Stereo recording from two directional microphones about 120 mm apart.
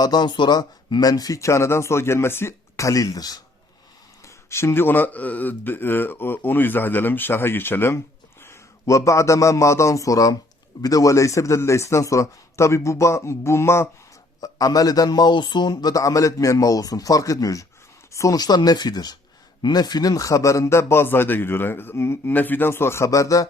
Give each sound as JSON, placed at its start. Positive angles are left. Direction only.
{"t": 0.0, "sound": "speech", "side_deg": 35}
{"t": 4.2, "sound": "speech", "side_deg": 20}